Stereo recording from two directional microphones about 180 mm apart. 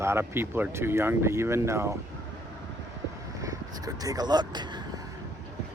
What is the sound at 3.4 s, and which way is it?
Speech, 20° right (ahead or behind).